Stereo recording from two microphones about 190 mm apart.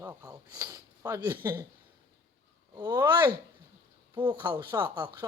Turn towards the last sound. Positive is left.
turn(degrees=-25)  # may be behind; listen again after turning